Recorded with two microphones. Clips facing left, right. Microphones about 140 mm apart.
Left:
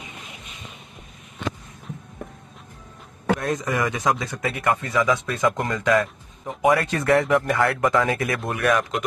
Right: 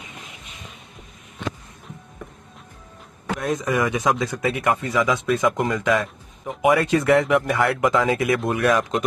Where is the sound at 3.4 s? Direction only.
10° right (ahead or behind).